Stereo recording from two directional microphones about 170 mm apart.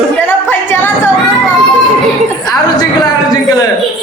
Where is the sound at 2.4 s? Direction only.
20° left (ahead or behind).